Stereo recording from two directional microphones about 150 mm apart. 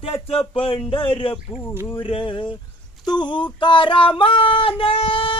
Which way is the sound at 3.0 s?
30° left (ahead or behind).